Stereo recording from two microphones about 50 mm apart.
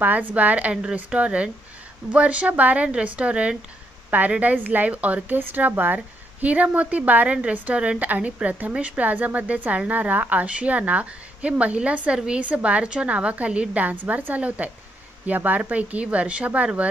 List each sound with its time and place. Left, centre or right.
0.0 s speech: right
6.4 s speech: right